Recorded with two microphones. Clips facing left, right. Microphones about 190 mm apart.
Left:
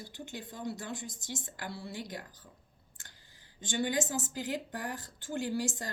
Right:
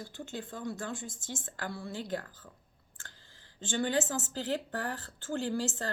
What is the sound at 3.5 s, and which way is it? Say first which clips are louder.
Speech: right 2 dB; 15° left (ahead or behind).